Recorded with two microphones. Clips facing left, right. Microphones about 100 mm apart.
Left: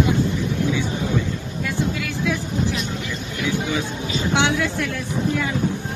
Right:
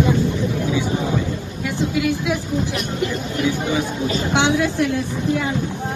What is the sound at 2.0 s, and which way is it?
Speech, 20° right (ahead or behind).